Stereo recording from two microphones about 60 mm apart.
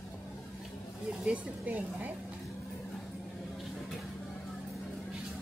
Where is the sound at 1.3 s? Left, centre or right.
Right.